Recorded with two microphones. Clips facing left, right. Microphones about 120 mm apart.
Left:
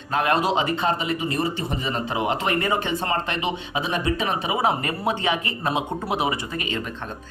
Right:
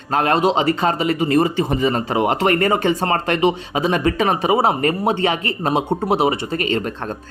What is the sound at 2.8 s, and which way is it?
A man's voice, 45° right (ahead or behind).